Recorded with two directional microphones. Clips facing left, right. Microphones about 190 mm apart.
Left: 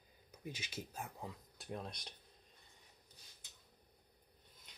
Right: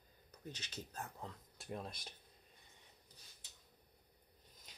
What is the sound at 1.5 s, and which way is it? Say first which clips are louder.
Speech: right 1 dB; centre (ahead or behind).